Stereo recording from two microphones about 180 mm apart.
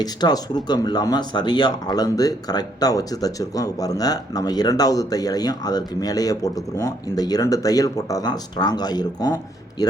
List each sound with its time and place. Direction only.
0.0 s speech: 25° left (ahead or behind)